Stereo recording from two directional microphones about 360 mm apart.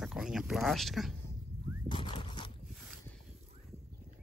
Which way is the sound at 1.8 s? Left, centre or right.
Centre.